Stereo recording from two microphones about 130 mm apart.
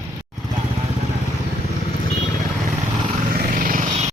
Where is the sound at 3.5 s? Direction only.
90° right.